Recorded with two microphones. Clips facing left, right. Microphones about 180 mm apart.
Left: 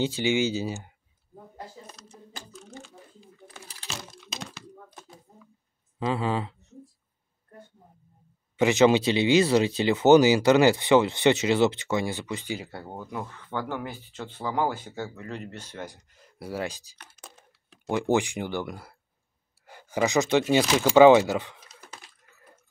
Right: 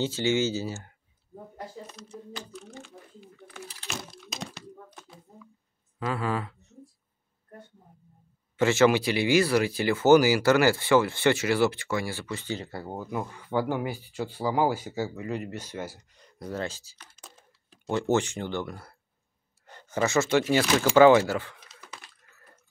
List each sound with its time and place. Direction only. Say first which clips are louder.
0.0 s speech: left 1 dB; 15° left (ahead or behind)
2.0 s a sound: right 5 dB; 40° left (ahead or behind)
5.9 s speech: left 2 dB; 25° left (ahead or behind)
8.5 s speech: left 2 dB; 15° left (ahead or behind)
12.6 s speech: right 3 dB; 5° right (ahead or behind); by 17.0 s 15° left (ahead or behind)
17.0 s a sound: left 4 dB; 65° left (ahead or behind)
17.8 s speech: left 1 dB; 15° left (ahead or behind)